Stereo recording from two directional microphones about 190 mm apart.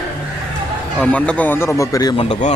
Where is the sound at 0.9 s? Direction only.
5° left (ahead or behind).